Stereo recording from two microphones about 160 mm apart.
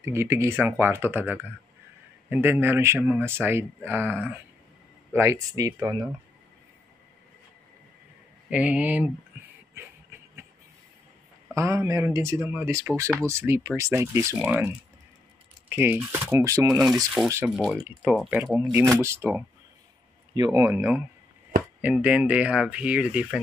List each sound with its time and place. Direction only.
0.0 s speech: 15° right (ahead or behind)
8.5 s speech: 10° right (ahead or behind)
11.5 s speech: 20° right (ahead or behind)
17.2 s speech: centre (ahead or behind)
18.4 s speech: 15° right (ahead or behind)